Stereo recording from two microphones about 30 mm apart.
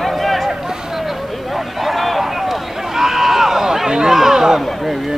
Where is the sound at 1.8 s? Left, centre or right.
Centre.